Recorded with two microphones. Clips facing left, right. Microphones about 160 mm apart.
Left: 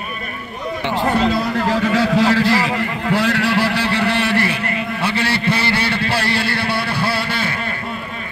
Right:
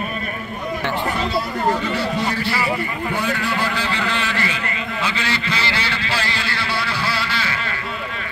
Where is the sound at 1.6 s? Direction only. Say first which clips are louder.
Left 3 dB; 90° left; by 5.6 s 60° left (ahead or behind).